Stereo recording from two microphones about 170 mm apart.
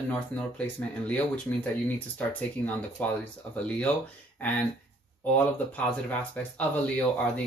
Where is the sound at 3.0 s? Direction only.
10° left (ahead or behind).